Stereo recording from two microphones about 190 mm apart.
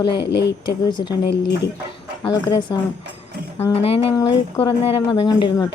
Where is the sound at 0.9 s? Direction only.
25° left (ahead or behind).